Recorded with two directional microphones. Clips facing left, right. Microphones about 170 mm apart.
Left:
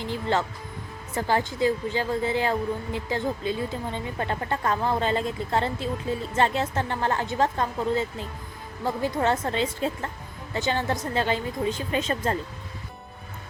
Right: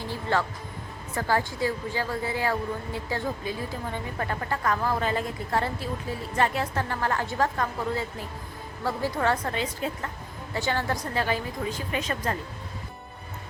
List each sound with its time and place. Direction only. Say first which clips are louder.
0.1 s speech: left 1 dB; 20° left (ahead or behind)